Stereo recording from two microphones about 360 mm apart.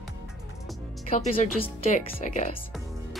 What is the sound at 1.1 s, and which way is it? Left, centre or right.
A woman's voice, centre.